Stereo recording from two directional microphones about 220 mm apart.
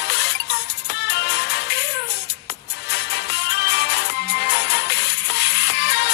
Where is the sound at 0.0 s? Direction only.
50° left (ahead or behind).